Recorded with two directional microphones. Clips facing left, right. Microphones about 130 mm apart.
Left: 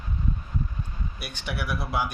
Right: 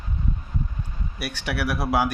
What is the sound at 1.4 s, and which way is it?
Speech, 65° right (ahead or behind).